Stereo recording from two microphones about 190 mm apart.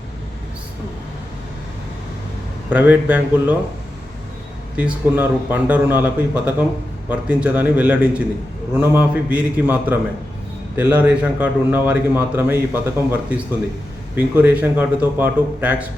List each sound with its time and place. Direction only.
2.6 s a man's voice: 10° right (ahead or behind)
4.8 s a man's voice: 10° right (ahead or behind)